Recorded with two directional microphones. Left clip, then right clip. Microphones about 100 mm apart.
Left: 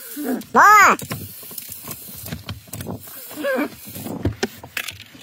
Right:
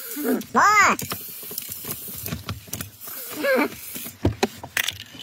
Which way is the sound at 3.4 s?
45° right (ahead or behind).